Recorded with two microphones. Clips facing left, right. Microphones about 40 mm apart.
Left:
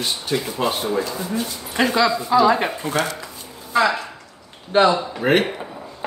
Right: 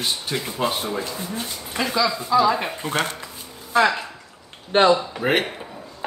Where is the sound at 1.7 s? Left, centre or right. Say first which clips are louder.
Left 4 dB; left.